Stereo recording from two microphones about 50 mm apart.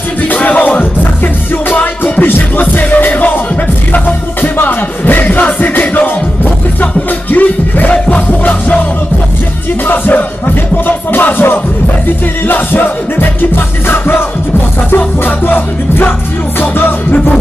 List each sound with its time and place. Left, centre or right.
0.3 s music: left
9.8 s music: left